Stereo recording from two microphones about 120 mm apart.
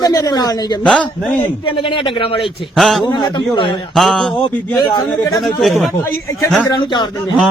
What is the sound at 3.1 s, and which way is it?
Speech, 40° left (ahead or behind).